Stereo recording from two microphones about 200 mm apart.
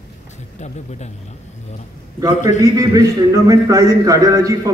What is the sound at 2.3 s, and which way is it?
Speech, 35° left (ahead or behind).